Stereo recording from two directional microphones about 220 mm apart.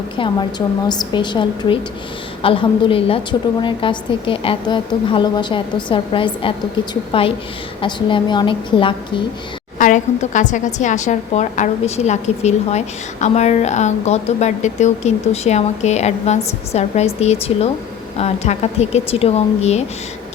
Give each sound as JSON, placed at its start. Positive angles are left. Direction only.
{"t": 0.9, "sound": "a woman's voice", "side_deg": 20}
{"t": 9.7, "sound": "a woman's voice", "side_deg": 35}